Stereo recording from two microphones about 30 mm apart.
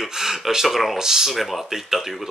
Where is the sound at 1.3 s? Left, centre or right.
Centre.